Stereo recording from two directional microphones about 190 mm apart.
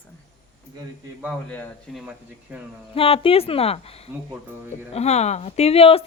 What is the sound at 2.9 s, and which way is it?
Speech, 30° left (ahead or behind).